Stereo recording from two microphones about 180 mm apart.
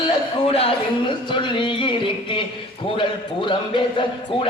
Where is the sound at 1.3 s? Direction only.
25° left (ahead or behind).